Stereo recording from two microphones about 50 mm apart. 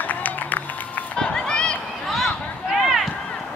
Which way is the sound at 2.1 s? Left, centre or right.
Centre.